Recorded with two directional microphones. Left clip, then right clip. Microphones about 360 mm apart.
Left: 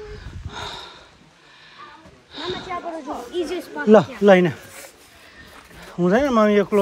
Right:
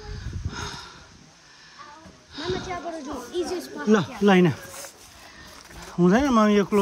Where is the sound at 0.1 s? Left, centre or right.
Centre.